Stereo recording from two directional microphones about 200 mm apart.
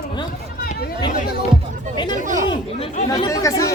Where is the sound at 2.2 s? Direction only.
40° right (ahead or behind).